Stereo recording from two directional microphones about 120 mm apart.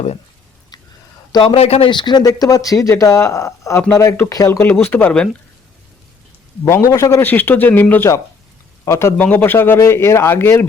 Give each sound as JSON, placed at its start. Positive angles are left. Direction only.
{"t": 1.3, "sound": "a man's voice", "side_deg": 45}
{"t": 1.9, "sound": "speech", "side_deg": 40}
{"t": 4.6, "sound": "speech", "side_deg": 15}
{"t": 6.7, "sound": "speech", "side_deg": 25}
{"t": 7.3, "sound": "speech", "side_deg": 15}